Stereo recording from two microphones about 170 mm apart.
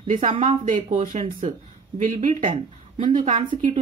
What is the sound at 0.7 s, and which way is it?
A woman's voice, 55° right (ahead or behind).